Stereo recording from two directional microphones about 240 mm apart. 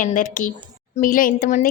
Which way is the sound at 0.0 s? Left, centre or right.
Left.